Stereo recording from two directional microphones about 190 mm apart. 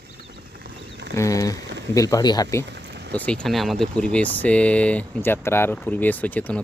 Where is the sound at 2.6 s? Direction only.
65° right (ahead or behind).